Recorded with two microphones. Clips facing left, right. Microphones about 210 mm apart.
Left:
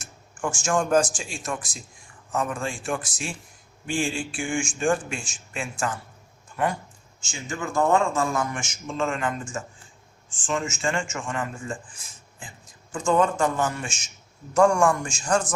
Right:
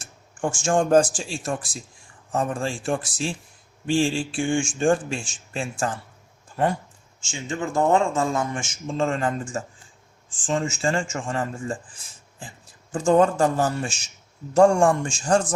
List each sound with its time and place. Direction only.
0.0 s speech: 30° right (ahead or behind)